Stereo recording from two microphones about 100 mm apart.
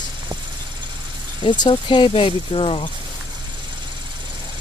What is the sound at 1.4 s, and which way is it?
Speech, 55° left (ahead or behind).